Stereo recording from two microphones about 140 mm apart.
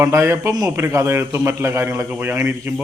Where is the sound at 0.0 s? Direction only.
20° right (ahead or behind).